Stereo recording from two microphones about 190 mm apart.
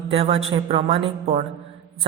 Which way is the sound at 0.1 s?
30° right (ahead or behind).